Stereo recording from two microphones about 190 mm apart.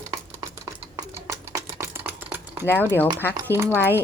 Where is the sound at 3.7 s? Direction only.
10° left (ahead or behind).